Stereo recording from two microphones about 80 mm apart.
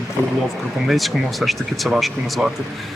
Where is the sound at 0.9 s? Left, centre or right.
Centre.